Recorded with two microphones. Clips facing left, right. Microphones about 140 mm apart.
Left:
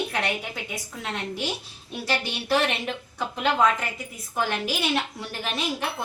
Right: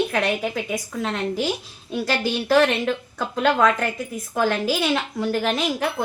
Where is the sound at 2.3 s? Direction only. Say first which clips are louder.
Right 8 dB; 90° right.